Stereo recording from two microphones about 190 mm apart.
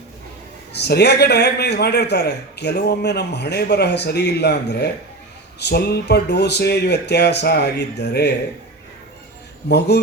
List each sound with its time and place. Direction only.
0.7 s a man's voice: 60° left (ahead or behind)
9.6 s a man's voice: 60° left (ahead or behind)